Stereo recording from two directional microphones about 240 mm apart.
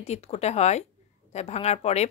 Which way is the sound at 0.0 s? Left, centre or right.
Left.